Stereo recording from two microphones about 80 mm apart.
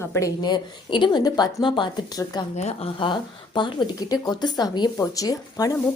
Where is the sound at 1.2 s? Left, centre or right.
Left.